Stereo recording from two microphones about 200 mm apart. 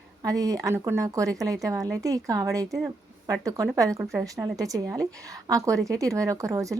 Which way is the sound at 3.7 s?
15° right (ahead or behind).